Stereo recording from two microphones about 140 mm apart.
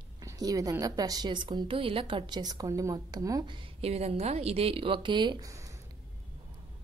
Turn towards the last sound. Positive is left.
turn(degrees=-20)  # may be behind; listen again after turning